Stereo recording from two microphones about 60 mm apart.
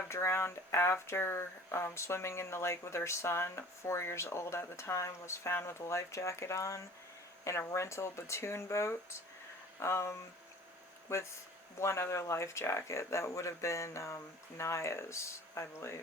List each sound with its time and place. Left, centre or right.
0.1 s speech: left